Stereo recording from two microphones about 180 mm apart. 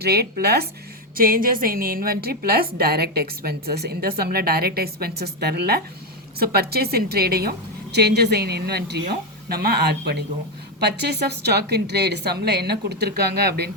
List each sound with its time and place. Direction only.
0.0 s a woman's voice: 60° right (ahead or behind)
1.1 s a woman's voice: 55° right (ahead or behind)